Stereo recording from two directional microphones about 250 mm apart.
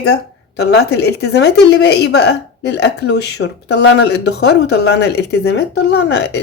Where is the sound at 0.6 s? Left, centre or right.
Left.